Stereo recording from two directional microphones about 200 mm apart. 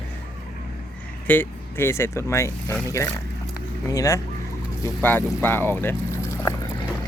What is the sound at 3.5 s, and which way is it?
Vehicle, 15° left (ahead or behind).